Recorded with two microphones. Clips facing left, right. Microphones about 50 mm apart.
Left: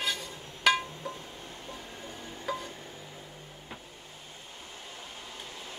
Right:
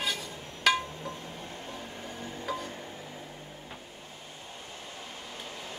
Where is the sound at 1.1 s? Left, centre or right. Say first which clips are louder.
Right 3 dB; right.